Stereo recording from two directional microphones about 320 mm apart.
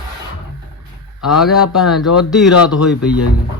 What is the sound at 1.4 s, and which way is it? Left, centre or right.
Speech, centre.